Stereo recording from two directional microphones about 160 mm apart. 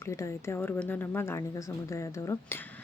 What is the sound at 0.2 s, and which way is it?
Speech, 15° left (ahead or behind).